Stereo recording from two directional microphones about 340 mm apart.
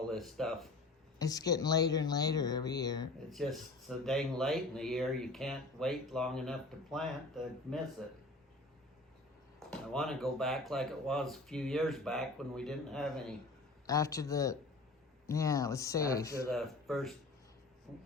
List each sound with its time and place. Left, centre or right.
0.1 s speech: centre
3.2 s speech: centre
9.6 s speech: centre